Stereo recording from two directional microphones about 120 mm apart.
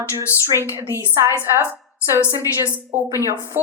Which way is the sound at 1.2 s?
25° left (ahead or behind).